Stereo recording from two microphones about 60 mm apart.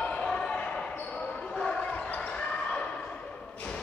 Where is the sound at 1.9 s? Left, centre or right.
Left.